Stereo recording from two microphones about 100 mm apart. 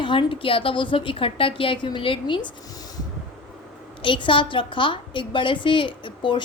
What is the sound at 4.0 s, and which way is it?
A woman's voice, 55° left (ahead or behind).